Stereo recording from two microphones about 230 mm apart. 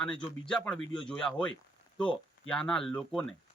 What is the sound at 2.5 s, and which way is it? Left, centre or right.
Speech, centre.